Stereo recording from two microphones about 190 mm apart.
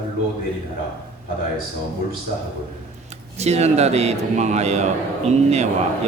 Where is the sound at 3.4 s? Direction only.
35° right (ahead or behind).